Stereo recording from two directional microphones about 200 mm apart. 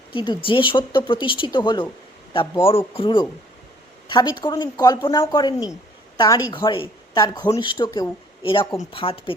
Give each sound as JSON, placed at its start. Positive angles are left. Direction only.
{"t": 0.1, "sound": "speech", "side_deg": 25}